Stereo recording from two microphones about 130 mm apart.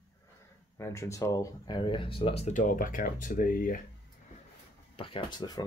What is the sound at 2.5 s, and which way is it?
Speech, 90° left.